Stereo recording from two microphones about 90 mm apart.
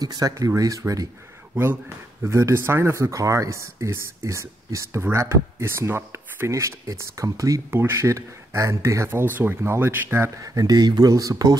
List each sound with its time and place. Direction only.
0.0 s speech: 45° right (ahead or behind)
1.5 s speech: 20° right (ahead or behind); by 7.6 s 40° right (ahead or behind)
7.7 s speech: 30° right (ahead or behind)
10.4 s speech: 40° right (ahead or behind)